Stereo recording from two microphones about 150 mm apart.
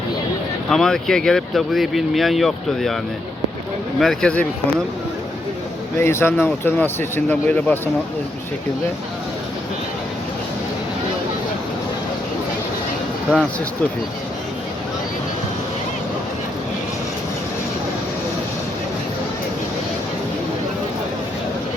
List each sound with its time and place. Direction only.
0.7 s speech: 5° left (ahead or behind)
4.0 s speech: 5° left (ahead or behind)
6.0 s speech: 15° left (ahead or behind)